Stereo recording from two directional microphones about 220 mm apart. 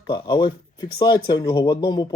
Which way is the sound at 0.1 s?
20° left (ahead or behind).